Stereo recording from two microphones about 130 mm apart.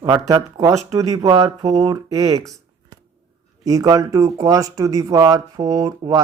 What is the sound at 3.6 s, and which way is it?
Speech, 25° right (ahead or behind).